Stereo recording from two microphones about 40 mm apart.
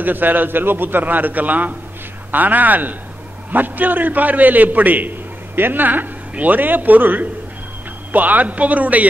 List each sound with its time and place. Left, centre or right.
0.0 s a man's voice: right